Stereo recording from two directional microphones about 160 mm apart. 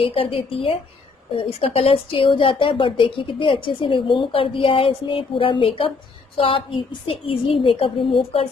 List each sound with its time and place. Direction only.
0.0 s speech: 35° left (ahead or behind)